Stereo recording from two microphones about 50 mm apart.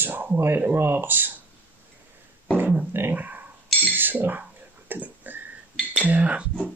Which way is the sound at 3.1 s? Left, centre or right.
Right.